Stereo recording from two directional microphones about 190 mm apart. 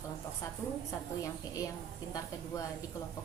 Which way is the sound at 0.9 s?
15° left (ahead or behind).